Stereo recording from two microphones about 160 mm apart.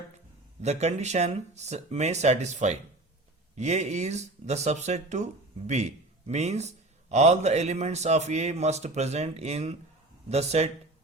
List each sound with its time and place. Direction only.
0.6 s a man's voice: 45° right (ahead or behind)